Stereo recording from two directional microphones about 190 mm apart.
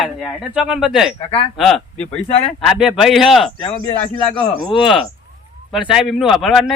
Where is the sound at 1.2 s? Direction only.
30° left (ahead or behind).